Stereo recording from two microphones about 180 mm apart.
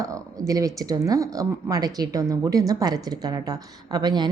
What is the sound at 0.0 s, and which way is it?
Speech, 20° right (ahead or behind).